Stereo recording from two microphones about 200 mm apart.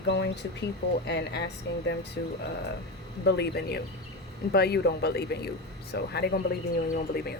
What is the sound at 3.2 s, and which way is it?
A woman's voice, 55° left (ahead or behind).